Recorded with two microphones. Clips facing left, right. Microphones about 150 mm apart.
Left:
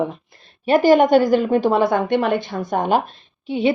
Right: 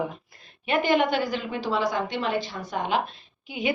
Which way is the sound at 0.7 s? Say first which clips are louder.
Left 10 dB; 40° left (ahead or behind).